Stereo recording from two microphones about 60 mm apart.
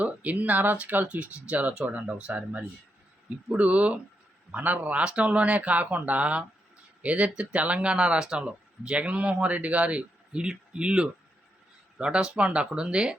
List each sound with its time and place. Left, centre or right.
0.0 s a man's voice: right